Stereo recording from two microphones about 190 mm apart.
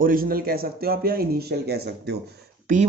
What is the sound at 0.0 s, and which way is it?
Speech, 50° right (ahead or behind).